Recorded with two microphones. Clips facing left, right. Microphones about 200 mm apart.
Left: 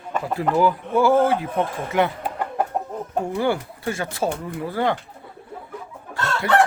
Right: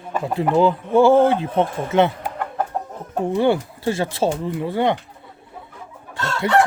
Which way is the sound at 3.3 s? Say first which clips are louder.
Right 7 dB; 25° right (ahead or behind).